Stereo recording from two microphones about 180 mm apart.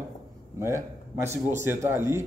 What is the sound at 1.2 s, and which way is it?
Speech, 15° right (ahead or behind).